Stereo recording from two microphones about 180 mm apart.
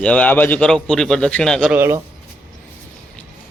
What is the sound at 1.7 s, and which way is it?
Speech, 15° right (ahead or behind).